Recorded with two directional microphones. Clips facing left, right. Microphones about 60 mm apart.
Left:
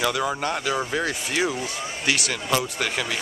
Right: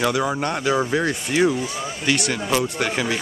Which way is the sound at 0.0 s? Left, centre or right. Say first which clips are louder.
Right 3 dB; centre.